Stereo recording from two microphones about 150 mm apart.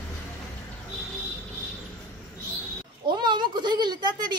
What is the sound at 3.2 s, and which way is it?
A woman's voice, 30° right (ahead or behind).